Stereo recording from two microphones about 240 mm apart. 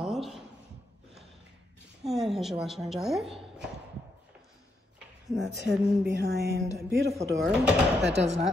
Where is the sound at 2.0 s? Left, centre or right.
Centre.